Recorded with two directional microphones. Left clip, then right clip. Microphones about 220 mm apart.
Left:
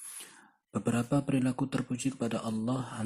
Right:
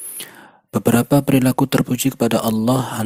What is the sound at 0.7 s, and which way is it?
Speech, 45° right (ahead or behind).